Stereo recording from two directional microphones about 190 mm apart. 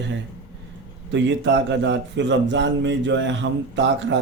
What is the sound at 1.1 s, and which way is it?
A man's voice, 70° right (ahead or behind).